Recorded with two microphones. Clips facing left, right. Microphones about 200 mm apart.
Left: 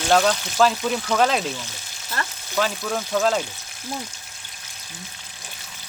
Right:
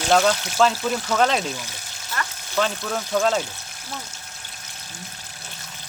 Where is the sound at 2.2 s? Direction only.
30° left (ahead or behind).